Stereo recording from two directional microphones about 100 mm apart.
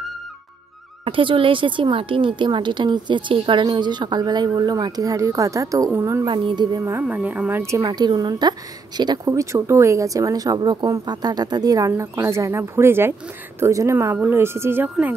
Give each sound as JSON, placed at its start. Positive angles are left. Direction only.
{"t": 1.0, "sound": "speech", "side_deg": -60}
{"t": 6.2, "sound": "speech", "side_deg": -50}
{"t": 6.8, "sound": "speech", "side_deg": -20}
{"t": 7.7, "sound": "speech", "side_deg": -40}
{"t": 9.3, "sound": "speech", "side_deg": -30}